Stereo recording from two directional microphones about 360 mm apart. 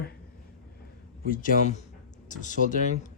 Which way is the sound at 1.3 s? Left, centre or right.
Left.